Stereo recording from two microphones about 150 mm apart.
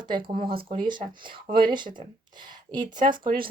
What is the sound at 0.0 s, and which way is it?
Speech, 35° right (ahead or behind).